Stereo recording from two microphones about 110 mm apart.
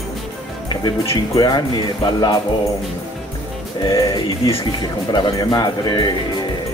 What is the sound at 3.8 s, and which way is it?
Music, 40° left (ahead or behind).